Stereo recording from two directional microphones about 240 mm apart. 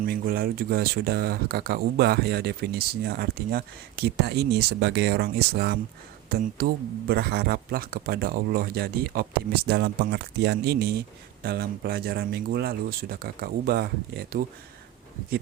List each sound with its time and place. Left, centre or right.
0.0 s speech: right